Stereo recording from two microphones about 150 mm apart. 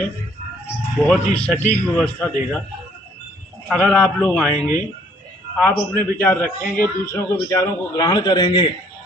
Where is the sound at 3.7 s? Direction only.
5° left (ahead or behind).